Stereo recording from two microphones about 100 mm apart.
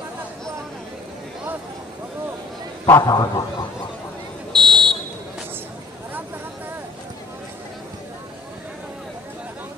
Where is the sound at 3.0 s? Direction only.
45° left (ahead or behind).